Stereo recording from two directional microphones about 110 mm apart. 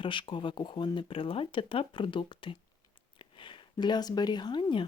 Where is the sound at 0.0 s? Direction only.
50° left (ahead or behind).